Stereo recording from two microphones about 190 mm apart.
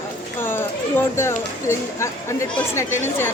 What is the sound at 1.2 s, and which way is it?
A woman's voice, 15° left (ahead or behind).